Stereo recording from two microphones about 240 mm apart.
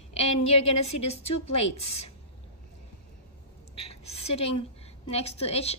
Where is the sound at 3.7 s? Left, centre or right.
Left.